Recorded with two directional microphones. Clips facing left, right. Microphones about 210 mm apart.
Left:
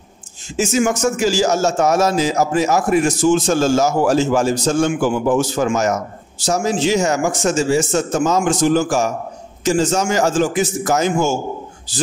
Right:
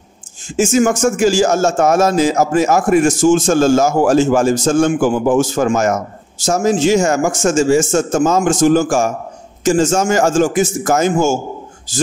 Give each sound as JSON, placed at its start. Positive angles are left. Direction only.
{"t": 0.6, "sound": "speech", "side_deg": -45}